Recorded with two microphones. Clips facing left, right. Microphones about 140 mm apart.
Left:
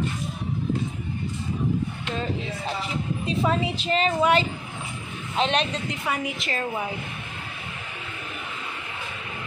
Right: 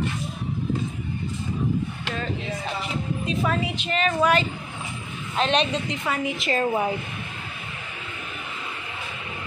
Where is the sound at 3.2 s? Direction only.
25° left (ahead or behind).